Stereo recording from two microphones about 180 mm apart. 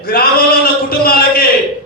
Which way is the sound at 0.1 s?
55° left (ahead or behind).